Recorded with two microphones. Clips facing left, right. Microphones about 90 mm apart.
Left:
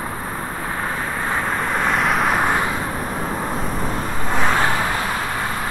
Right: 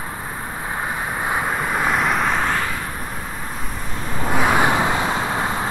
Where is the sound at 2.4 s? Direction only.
15° left (ahead or behind).